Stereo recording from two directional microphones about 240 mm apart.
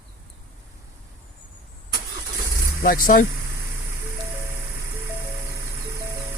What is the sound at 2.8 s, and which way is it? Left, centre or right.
Speech, left.